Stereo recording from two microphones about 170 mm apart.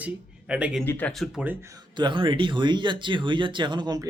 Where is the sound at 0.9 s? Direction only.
10° left (ahead or behind).